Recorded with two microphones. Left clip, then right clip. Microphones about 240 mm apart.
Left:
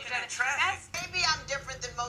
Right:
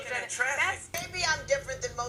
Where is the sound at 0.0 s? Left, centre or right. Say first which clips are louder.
Even; left.